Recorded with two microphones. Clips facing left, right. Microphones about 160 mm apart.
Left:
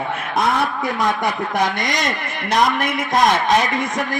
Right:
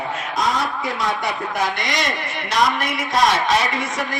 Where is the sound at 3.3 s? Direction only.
15° left (ahead or behind).